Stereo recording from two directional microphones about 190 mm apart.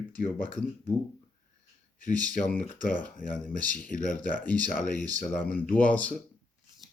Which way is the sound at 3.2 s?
45° left (ahead or behind).